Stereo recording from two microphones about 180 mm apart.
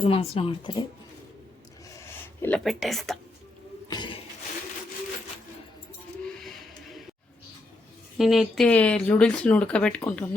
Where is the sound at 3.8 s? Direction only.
25° left (ahead or behind).